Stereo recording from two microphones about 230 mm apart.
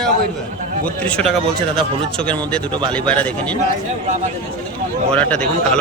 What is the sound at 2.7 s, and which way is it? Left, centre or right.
Speech, right.